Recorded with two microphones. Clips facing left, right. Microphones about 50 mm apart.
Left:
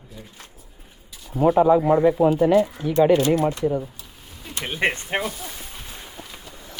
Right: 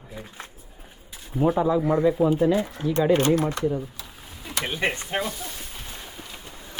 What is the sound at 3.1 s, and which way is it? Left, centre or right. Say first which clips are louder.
Speech: left 1 dB; right.